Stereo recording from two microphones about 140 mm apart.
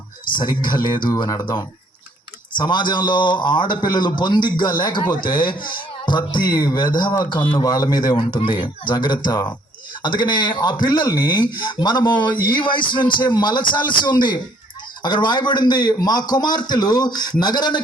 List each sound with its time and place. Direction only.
0.3 s a man's voice: 35° left (ahead or behind)
15.0 s a man's voice: 35° left (ahead or behind)